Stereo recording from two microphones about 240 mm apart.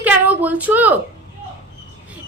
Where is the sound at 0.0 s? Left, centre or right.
Centre.